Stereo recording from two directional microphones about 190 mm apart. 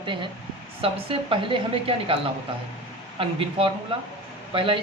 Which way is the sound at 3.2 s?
30° right (ahead or behind).